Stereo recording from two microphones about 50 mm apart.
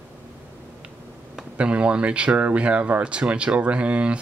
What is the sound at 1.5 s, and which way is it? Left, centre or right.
Speech, right.